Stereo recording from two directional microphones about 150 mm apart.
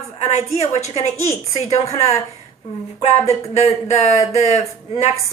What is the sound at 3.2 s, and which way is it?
A woman's voice, 45° left (ahead or behind).